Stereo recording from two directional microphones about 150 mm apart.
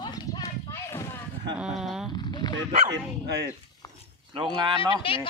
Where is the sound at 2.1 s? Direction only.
30° left (ahead or behind).